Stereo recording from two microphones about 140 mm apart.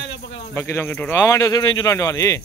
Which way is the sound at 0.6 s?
20° left (ahead or behind).